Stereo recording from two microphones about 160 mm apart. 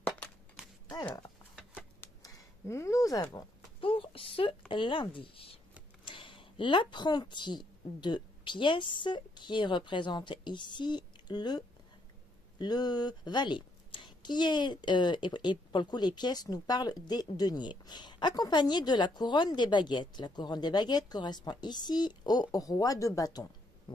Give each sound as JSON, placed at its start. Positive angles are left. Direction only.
{"t": 2.2, "sound": "a woman's voice", "side_deg": 20}